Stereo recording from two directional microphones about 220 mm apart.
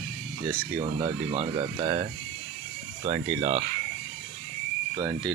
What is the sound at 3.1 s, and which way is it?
Speech, 35° right (ahead or behind).